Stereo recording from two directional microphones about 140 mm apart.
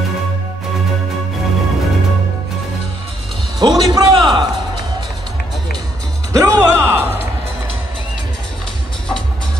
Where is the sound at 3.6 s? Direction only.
30° right (ahead or behind).